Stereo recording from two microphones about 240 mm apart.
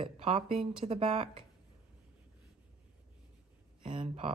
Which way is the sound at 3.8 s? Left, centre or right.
Right.